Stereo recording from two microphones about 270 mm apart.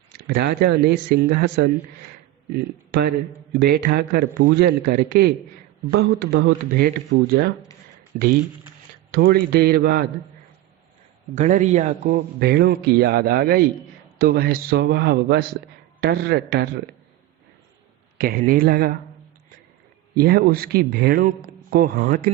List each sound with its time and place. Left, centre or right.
0.3 s a man's voice: right
11.3 s a man's voice: right
18.2 s a man's voice: right
20.1 s a man's voice: right